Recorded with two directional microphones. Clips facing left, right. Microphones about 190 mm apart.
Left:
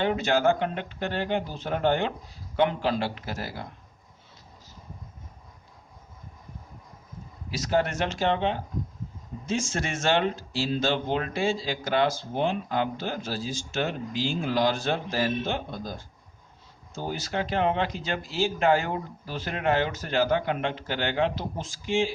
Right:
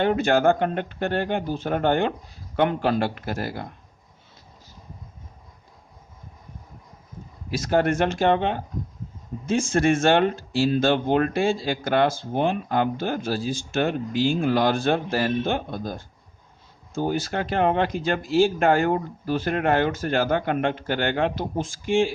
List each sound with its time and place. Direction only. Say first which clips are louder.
0.0 s speech: right 4 dB; 50° right (ahead or behind)
7.5 s speech: right 4 dB; 50° right (ahead or behind)